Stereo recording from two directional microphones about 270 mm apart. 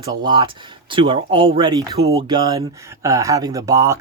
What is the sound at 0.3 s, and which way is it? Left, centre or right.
Speech, centre.